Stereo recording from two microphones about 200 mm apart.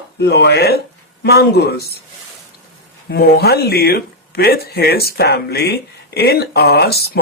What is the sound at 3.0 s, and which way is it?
Speech, 50° left (ahead or behind).